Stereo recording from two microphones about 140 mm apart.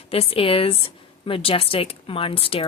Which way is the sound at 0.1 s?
45° left (ahead or behind).